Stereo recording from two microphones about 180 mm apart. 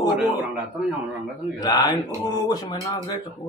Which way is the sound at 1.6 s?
20° left (ahead or behind).